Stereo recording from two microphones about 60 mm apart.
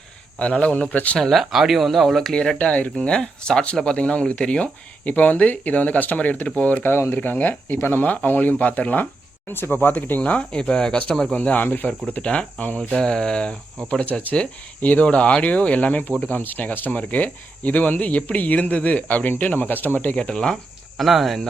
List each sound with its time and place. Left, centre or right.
0.3 s speech: centre
1.2 s speech: centre
2.6 s speech: left
9.5 s speech: left; by 11.3 s centre
11.3 s speech: left
20.2 s speech: centre
21.0 s speech: centre